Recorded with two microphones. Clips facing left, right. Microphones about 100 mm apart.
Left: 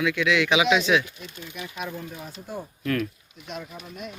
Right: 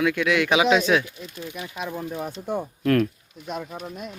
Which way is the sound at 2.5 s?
60° right (ahead or behind).